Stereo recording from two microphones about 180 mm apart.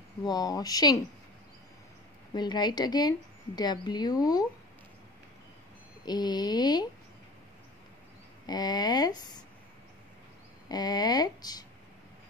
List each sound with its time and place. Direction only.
0.2 s a woman's voice: 20° left (ahead or behind)
2.3 s a woman's voice: 25° left (ahead or behind)
6.0 s a woman's voice: 25° left (ahead or behind)
8.5 s a woman's voice: 20° left (ahead or behind)
10.7 s a woman's voice: 20° left (ahead or behind)